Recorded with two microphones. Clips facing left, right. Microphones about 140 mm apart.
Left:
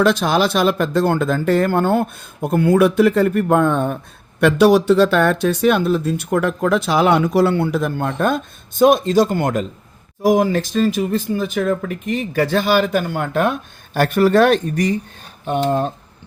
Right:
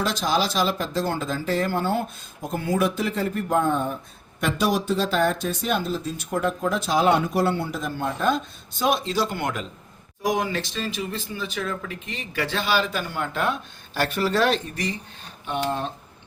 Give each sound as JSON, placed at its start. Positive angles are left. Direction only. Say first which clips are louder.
{"t": 0.0, "sound": "speech", "louder": "left 8 dB", "side_deg": 65}